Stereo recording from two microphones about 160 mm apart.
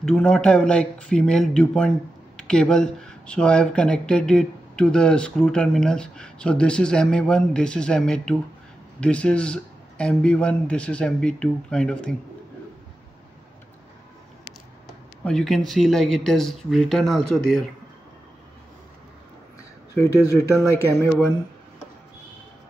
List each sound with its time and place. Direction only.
0.0 s speech: 5° left (ahead or behind)
15.2 s speech: 5° left (ahead or behind)
20.0 s speech: 15° left (ahead or behind)